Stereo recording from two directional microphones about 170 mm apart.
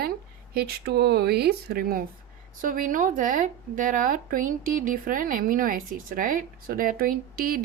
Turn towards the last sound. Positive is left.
turn(degrees=-60)  # may be behind; listen again after turning